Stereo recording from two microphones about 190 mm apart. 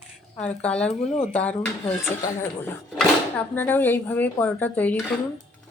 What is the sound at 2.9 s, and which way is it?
Speech, 10° left (ahead or behind).